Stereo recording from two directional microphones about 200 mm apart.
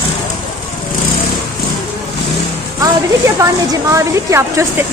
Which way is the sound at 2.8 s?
15° right (ahead or behind).